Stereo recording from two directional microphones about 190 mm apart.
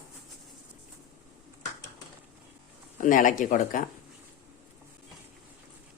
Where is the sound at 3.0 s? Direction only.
45° left (ahead or behind).